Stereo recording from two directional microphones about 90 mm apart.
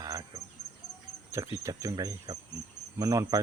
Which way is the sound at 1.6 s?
35° right (ahead or behind).